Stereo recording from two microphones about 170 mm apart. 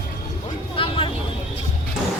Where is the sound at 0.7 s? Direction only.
30° left (ahead or behind).